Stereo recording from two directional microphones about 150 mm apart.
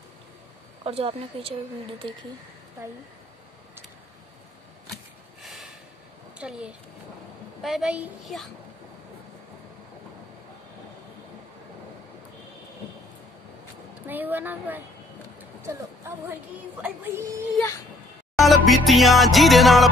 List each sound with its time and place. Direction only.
0.8 s speech: 40° right (ahead or behind)
5.4 s snort: centre (ahead or behind)
6.3 s a child's voice: 5° right (ahead or behind)
14.0 s speech: 10° right (ahead or behind)
17.6 s speech: 20° left (ahead or behind)
18.4 s music: centre (ahead or behind)